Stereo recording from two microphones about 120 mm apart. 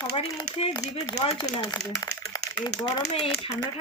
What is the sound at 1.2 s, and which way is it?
Speech, 45° left (ahead or behind).